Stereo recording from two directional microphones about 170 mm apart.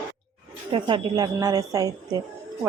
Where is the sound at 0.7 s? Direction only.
25° right (ahead or behind).